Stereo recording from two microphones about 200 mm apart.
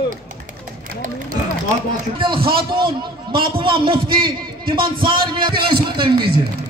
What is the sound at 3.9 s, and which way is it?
A man's voice, 50° right (ahead or behind).